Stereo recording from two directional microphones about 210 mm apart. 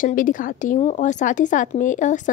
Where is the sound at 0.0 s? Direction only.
40° left (ahead or behind).